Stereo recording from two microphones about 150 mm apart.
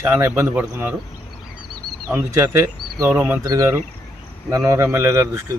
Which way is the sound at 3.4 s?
25° right (ahead or behind).